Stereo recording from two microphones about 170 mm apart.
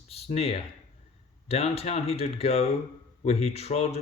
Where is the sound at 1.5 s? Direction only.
35° left (ahead or behind).